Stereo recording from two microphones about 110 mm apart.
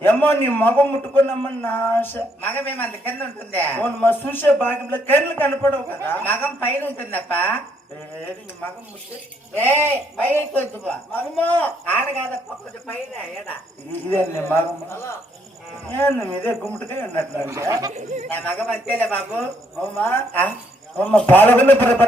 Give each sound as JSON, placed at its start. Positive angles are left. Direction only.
{"t": 0.0, "sound": "a woman's voice", "side_deg": 20}
{"t": 9.6, "sound": "a woman's voice", "side_deg": 15}
{"t": 13.5, "sound": "speech", "side_deg": 20}
{"t": 17.3, "sound": "speech", "side_deg": -25}
{"t": 17.9, "sound": "speech", "side_deg": -90}
{"t": 18.3, "sound": "a woman's voice", "side_deg": 20}